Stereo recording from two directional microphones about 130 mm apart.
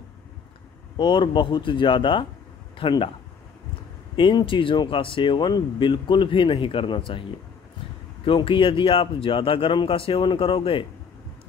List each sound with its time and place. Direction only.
0.9 s speech: 35° left (ahead or behind)
4.2 s speech: 35° left (ahead or behind)
8.3 s speech: 40° left (ahead or behind)